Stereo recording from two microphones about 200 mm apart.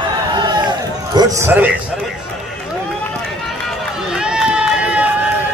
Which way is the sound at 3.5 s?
Centre (ahead or behind).